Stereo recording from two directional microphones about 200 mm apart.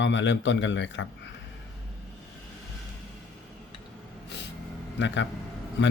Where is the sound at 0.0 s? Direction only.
65° left (ahead or behind).